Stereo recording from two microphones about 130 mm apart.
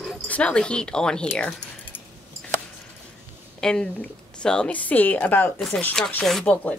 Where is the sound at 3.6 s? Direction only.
5° left (ahead or behind).